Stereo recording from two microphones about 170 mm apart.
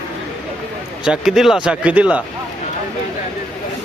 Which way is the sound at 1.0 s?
5° right (ahead or behind).